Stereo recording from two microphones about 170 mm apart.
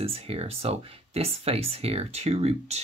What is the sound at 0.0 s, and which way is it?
Speech, 35° right (ahead or behind).